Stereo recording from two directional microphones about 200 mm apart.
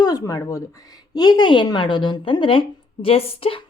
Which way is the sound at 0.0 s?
20° left (ahead or behind).